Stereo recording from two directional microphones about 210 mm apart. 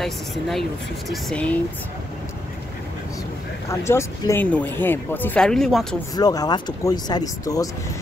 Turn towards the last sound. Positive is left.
turn(degrees=15)  # may be behind; listen again after turning